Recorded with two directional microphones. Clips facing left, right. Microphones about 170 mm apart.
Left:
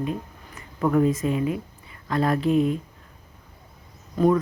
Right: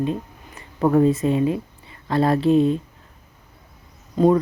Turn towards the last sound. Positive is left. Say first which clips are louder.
# right 3 dB
turn(degrees=-25)  # may be behind; listen again after turning